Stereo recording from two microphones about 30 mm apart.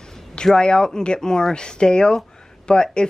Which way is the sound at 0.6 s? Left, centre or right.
Left.